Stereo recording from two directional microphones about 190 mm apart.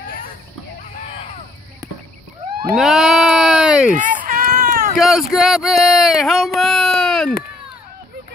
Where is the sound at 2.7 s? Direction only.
Centre (ahead or behind).